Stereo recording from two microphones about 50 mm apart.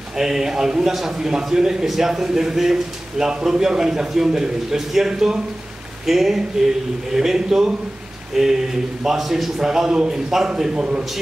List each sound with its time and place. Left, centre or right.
0.2 s speech: centre